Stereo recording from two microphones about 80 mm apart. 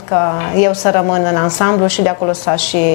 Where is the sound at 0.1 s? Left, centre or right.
Left.